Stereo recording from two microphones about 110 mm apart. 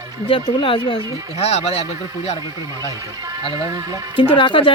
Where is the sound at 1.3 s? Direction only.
70° left (ahead or behind).